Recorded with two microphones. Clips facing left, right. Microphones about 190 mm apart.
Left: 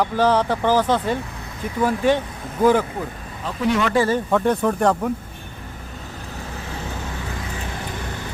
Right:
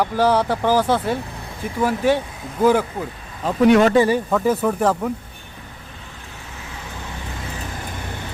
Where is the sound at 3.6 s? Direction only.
60° right (ahead or behind).